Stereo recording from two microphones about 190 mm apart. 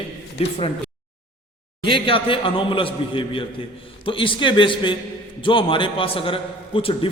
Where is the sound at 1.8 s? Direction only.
25° left (ahead or behind).